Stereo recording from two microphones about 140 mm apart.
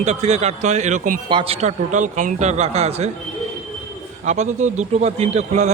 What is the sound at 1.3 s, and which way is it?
Speech, 40° right (ahead or behind).